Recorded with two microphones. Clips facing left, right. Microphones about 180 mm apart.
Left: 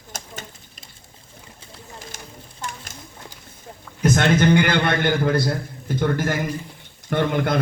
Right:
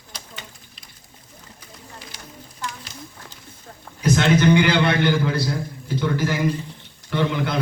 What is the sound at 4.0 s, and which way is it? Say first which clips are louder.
A man's voice: even; 50° left (ahead or behind).